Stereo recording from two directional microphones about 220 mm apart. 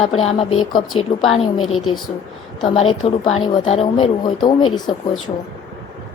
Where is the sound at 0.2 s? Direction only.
25° left (ahead or behind).